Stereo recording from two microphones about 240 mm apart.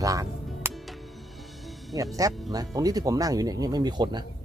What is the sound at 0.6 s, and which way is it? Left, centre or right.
Music, centre.